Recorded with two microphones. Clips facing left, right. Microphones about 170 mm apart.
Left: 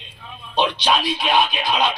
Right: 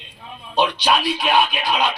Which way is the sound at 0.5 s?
10° right (ahead or behind).